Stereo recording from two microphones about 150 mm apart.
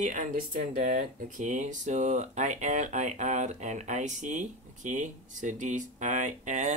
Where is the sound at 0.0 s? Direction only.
60° right (ahead or behind).